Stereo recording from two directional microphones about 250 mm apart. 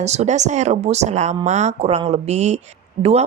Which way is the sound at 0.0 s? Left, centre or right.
Right.